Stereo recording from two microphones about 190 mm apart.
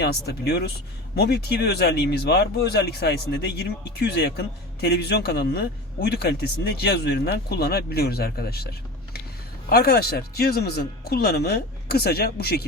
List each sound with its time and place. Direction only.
0.0 s speech: 60° left (ahead or behind)